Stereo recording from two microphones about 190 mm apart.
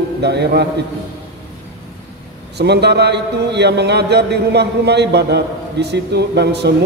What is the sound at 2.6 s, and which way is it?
A man's voice, 60° right (ahead or behind).